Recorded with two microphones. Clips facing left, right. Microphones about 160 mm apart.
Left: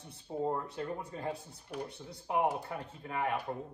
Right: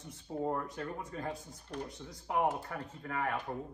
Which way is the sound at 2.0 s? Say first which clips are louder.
Left 1 dB; 20° left (ahead or behind).